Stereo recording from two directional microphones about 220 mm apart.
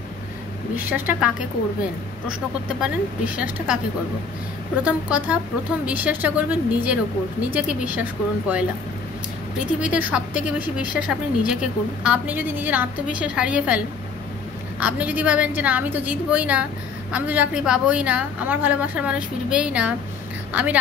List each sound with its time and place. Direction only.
0.7 s a woman's voice: 10° right (ahead or behind)
2.8 s a woman's voice: 5° right (ahead or behind)
4.8 s a woman's voice: 5° right (ahead or behind)
9.7 s a woman's voice: 5° right (ahead or behind)